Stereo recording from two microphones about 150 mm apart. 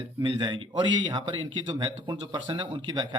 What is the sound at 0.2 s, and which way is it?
A man's voice, 30° right (ahead or behind).